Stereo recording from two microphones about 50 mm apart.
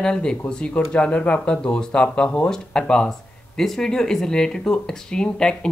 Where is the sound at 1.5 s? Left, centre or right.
Centre.